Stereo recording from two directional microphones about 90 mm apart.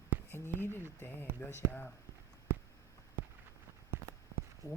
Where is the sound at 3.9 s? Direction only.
35° right (ahead or behind).